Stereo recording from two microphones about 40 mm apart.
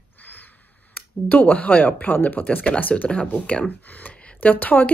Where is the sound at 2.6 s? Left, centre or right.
Left.